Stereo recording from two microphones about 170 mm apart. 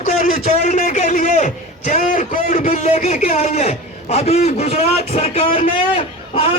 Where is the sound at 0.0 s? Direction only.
55° left (ahead or behind).